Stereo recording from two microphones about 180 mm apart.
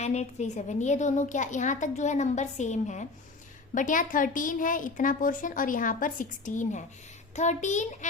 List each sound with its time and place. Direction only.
0.0 s a woman's voice: 40° left (ahead or behind)